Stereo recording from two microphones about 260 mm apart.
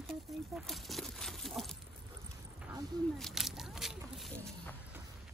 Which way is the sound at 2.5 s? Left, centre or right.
Centre.